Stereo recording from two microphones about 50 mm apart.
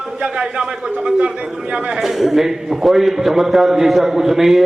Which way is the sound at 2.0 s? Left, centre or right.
Centre.